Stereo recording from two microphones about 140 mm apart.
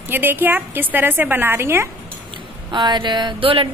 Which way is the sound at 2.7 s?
30° right (ahead or behind).